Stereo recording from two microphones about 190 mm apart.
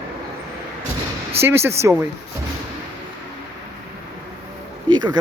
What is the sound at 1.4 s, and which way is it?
Speech, 15° right (ahead or behind).